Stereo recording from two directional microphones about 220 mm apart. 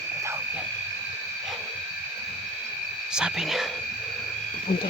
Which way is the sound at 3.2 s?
5° right (ahead or behind).